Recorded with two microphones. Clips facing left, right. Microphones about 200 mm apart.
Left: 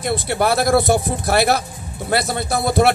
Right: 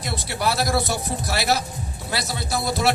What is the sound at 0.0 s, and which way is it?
Speech, 55° left (ahead or behind).